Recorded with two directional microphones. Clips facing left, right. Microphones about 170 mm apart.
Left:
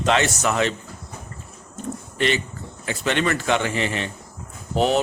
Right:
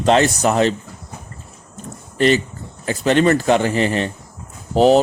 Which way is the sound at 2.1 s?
40° right (ahead or behind).